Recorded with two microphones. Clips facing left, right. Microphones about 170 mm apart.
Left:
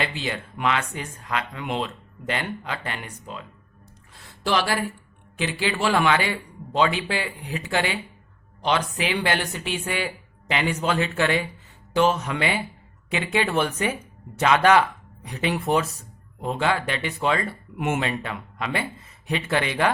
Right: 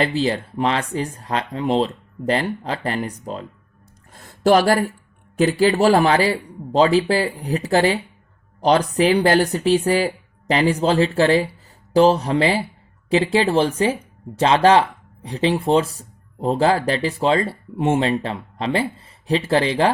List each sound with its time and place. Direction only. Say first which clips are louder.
0.0 s speech: right 9 dB; 35° right (ahead or behind)
4.1 s a sound: right 9 dB; 45° right (ahead or behind)
5.4 s speech: right 10 dB; 40° right (ahead or behind)